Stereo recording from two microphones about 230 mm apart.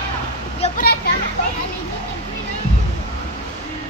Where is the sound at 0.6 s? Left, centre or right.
Left.